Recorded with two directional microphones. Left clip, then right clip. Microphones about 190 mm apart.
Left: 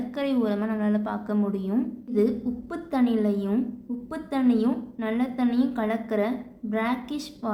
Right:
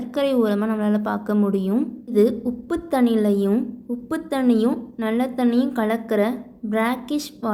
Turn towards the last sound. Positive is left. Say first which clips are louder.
# right 7 dB
turn(degrees=-35)  # may be behind; listen again after turning